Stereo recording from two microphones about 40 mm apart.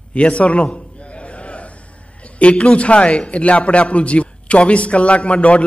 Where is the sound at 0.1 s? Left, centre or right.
Left.